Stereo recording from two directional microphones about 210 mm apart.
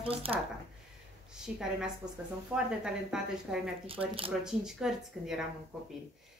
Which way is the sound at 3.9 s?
25° right (ahead or behind).